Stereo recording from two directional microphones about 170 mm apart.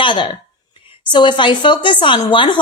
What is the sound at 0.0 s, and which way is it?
Speech, 30° left (ahead or behind).